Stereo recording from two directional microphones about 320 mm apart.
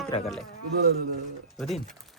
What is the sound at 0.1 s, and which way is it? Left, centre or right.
Speech, centre.